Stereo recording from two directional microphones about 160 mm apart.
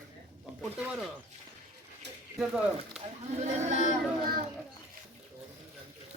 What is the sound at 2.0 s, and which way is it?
Bird, 90° right.